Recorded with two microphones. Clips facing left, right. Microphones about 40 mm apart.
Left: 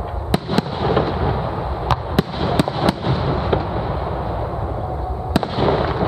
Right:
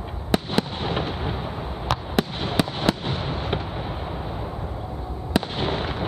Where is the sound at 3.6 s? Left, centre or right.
Left.